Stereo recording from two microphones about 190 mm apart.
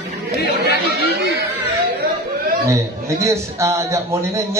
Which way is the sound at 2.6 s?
15° right (ahead or behind).